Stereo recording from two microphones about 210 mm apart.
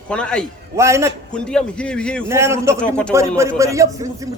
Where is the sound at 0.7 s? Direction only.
15° right (ahead or behind).